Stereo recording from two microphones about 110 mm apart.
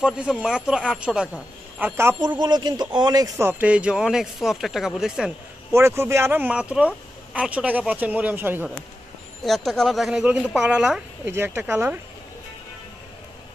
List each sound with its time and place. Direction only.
0.0 s speech: 10° right (ahead or behind)
2.1 s speech: 40° right (ahead or behind)
3.3 s speech: 20° right (ahead or behind)
5.7 s speech: 25° right (ahead or behind)
9.4 s speech: centre (ahead or behind)
11.2 s speech: 20° right (ahead or behind)